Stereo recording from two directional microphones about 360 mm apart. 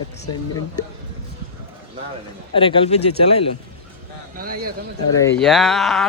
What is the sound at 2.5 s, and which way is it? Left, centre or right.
Speech, centre.